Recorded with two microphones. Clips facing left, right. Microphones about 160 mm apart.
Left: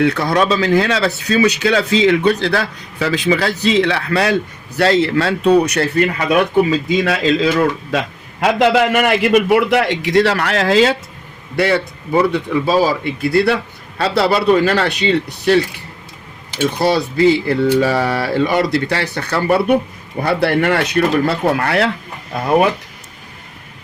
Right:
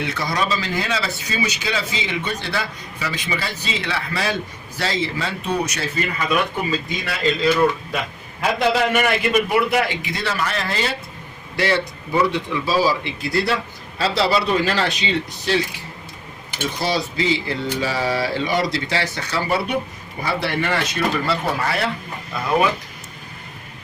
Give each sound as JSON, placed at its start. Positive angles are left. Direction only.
{"t": 0.0, "sound": "speech", "side_deg": 65}
{"t": 11.5, "sound": "speech", "side_deg": 55}
{"t": 16.7, "sound": "speech", "side_deg": 55}
{"t": 22.3, "sound": "speech", "side_deg": 55}